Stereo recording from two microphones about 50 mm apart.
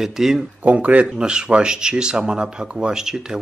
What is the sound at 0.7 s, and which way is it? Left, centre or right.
Speech, right.